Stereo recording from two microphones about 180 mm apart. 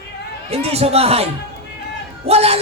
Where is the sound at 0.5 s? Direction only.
35° right (ahead or behind).